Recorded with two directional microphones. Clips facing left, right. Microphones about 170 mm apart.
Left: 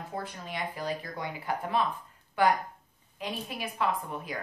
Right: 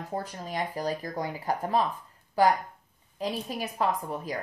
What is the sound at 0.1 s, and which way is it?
Speech, 40° right (ahead or behind).